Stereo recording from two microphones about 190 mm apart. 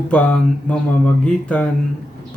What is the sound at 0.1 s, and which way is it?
A man's voice, 5° left (ahead or behind).